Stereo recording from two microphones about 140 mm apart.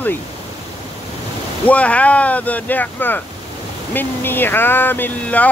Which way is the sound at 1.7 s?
10° left (ahead or behind).